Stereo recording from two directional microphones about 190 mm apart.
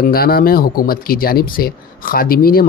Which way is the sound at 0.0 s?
50° left (ahead or behind).